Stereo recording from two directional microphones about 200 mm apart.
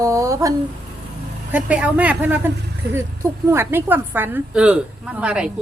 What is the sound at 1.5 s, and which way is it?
A woman's voice, 5° right (ahead or behind).